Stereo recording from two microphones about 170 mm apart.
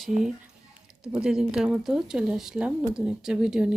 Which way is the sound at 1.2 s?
5° right (ahead or behind).